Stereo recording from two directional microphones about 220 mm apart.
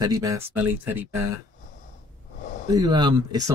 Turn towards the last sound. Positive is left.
turn(degrees=-15)  # may be behind; listen again after turning